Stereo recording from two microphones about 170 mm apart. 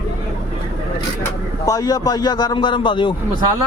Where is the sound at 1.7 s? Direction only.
20° left (ahead or behind).